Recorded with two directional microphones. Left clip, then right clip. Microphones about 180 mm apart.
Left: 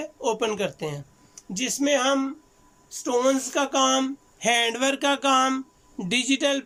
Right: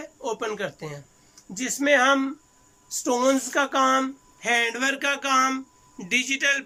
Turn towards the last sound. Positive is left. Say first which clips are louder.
# right 1 dB
turn(degrees=25)  # may be behind; listen again after turning